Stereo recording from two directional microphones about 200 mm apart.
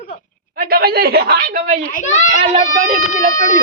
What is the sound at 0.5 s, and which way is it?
A woman's voice, 50° right (ahead or behind).